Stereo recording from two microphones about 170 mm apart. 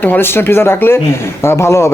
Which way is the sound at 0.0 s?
10° left (ahead or behind).